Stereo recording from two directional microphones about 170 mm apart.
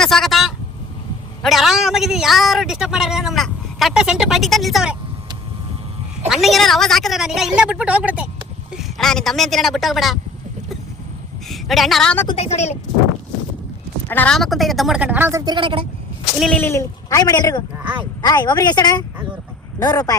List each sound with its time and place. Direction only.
0.0 s a sound: centre (ahead or behind)
1.4 s a man's voice: centre (ahead or behind)
6.2 s a man's voice: centre (ahead or behind)
11.4 s speech: centre (ahead or behind)
12.3 s a woman's voice: 40° left (ahead or behind)
14.1 s speech: 10° left (ahead or behind)
14.3 s a woman's voice: centre (ahead or behind); by 15.9 s 30° right (ahead or behind)
16.4 s a man's voice: 10° left (ahead or behind)